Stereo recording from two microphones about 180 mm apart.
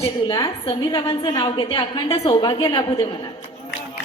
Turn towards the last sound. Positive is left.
turn(degrees=25)  # may be behind; listen again after turning